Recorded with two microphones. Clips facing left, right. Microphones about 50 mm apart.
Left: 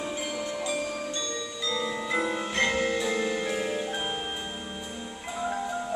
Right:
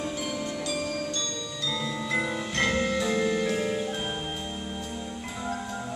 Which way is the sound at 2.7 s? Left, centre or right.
Left.